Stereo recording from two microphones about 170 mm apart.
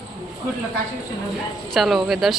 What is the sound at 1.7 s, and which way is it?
Speech, centre (ahead or behind).